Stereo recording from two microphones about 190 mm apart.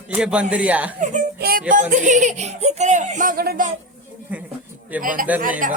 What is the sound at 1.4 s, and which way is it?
Speech, 55° right (ahead or behind).